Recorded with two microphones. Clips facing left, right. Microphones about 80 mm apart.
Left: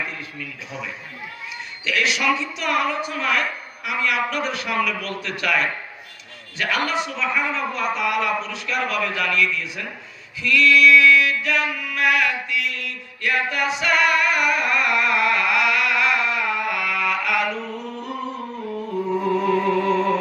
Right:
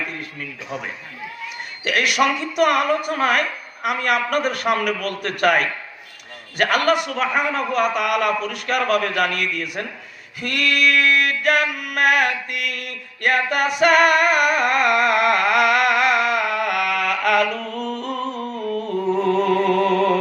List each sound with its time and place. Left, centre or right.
0.2 s a man's voice: right
10.3 s a sound: right
17.7 s music: right